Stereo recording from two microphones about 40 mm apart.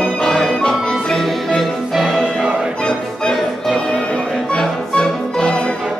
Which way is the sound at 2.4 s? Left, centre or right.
Right.